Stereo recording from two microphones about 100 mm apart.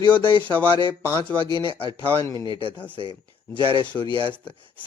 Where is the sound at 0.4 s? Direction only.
15° left (ahead or behind).